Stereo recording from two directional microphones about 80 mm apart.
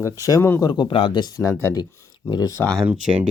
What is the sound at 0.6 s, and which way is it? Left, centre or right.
Speech, left.